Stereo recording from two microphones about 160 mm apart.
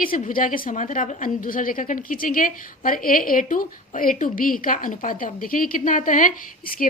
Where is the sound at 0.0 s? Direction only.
60° left (ahead or behind).